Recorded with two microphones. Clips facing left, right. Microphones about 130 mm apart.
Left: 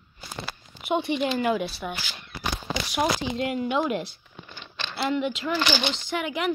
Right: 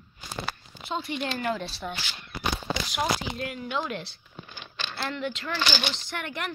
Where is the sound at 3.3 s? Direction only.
20° left (ahead or behind).